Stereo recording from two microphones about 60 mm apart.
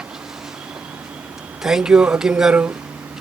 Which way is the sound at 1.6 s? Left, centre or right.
Centre.